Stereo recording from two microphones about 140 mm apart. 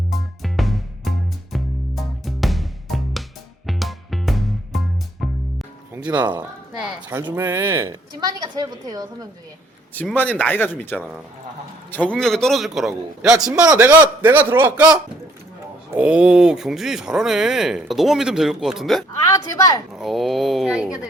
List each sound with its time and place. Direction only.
0.1 s music: centre (ahead or behind)
5.9 s music: 10° right (ahead or behind)
7.1 s a woman's voice: 20° right (ahead or behind)
9.9 s speech: 10° left (ahead or behind)
13.7 s a man's voice: 15° right (ahead or behind)
15.9 s speech: 10° right (ahead or behind)
19.2 s a woman's voice: 25° left (ahead or behind)
19.9 s speech: centre (ahead or behind)